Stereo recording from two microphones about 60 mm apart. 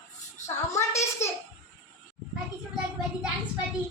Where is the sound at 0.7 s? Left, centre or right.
Left.